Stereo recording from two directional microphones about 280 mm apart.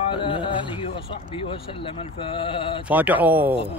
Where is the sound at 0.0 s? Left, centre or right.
Centre.